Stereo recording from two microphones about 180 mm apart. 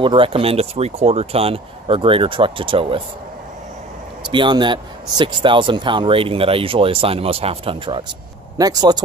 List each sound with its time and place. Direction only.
0.0 s speech: 30° right (ahead or behind)
4.3 s speech: 25° right (ahead or behind)